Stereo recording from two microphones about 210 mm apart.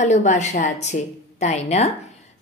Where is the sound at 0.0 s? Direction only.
35° left (ahead or behind).